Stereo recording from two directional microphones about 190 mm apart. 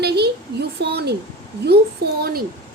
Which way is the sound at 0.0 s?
60° right (ahead or behind).